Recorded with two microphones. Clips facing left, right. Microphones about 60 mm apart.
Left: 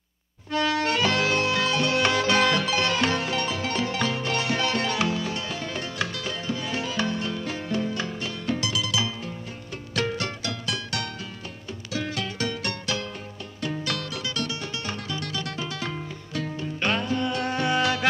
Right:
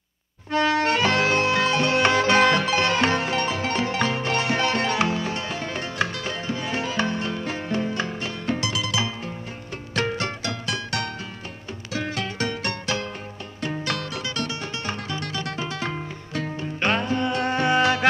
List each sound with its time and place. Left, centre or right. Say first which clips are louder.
0.5 s music: right 3 dB; right